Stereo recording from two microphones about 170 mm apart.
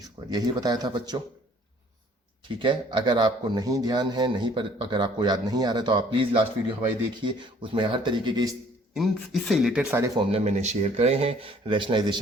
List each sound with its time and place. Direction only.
0.3 s a man's voice: 25° right (ahead or behind)
2.5 s a man's voice: 30° right (ahead or behind)
9.0 s speech: centre (ahead or behind)
10.2 s speech: 35° right (ahead or behind)